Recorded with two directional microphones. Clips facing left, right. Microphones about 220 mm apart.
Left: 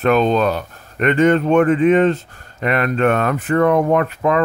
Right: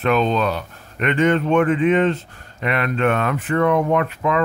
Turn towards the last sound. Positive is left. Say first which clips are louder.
# left 3 dB
turn(degrees=45)  # may be behind; listen again after turning